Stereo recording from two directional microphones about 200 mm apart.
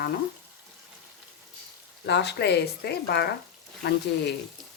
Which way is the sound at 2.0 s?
60° left (ahead or behind).